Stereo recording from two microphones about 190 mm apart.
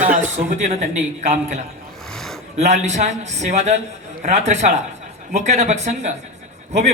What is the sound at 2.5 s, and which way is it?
A man's voice, 35° right (ahead or behind).